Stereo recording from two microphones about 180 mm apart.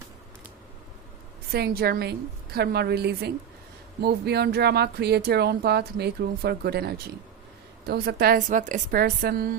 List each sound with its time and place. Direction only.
1.5 s speech: 60° right (ahead or behind)